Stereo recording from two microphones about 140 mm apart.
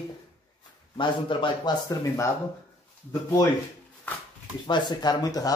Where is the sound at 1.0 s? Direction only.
35° left (ahead or behind).